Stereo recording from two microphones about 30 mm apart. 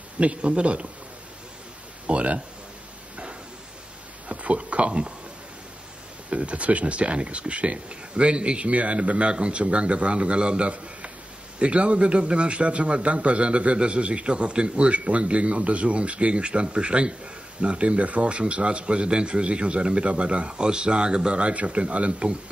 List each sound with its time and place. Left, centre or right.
0.2 s speech: right
2.0 s speech: right
4.3 s speech: right
6.3 s speech: right
15.0 s speech: right